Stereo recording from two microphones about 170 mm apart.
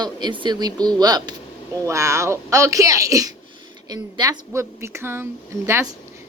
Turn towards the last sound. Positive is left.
turn(degrees=-15)  # may be behind; listen again after turning